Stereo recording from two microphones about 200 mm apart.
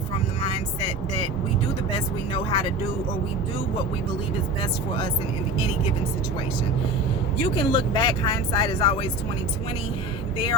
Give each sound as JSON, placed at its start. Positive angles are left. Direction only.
{"t": 2.3, "sound": "speech", "side_deg": 25}
{"t": 7.5, "sound": "speech", "side_deg": 25}